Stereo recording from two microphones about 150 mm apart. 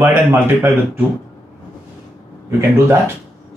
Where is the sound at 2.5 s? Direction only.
15° right (ahead or behind).